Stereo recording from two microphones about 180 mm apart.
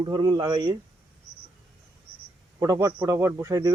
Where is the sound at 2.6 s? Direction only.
20° right (ahead or behind).